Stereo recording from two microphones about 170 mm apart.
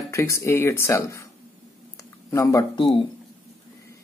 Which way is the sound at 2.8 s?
30° left (ahead or behind).